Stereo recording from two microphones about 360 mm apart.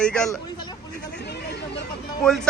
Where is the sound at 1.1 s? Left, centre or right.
Left.